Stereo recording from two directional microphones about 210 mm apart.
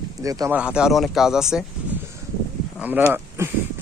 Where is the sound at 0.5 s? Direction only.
5° right (ahead or behind).